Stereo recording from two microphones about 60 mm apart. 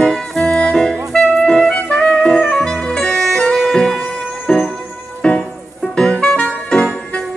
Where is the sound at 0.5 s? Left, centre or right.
Centre.